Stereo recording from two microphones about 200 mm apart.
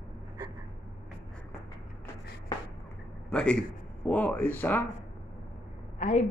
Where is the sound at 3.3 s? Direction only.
5° left (ahead or behind).